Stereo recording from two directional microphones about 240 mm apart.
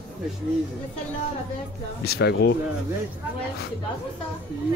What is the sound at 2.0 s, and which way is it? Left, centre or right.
Speech, left.